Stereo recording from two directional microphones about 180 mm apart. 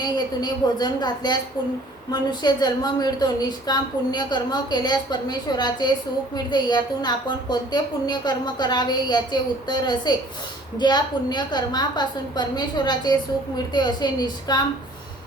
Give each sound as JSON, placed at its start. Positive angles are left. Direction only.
{"t": 0.0, "sound": "a woman's voice", "side_deg": 25}